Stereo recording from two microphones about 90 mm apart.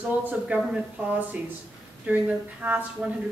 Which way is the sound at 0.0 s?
15° right (ahead or behind).